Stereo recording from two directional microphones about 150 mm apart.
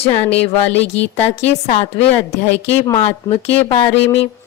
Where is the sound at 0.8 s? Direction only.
45° left (ahead or behind).